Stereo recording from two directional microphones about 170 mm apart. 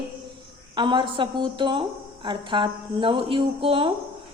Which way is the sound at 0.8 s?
30° right (ahead or behind).